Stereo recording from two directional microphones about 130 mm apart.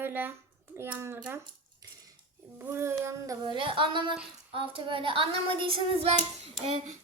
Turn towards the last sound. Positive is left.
turn(degrees=-50)  # may be behind; listen again after turning